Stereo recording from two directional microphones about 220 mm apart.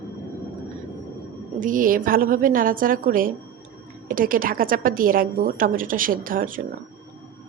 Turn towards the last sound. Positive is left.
turn(degrees=-40)  # may be behind; listen again after turning